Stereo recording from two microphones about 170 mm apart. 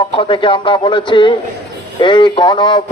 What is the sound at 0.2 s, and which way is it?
A man's voice, 30° left (ahead or behind).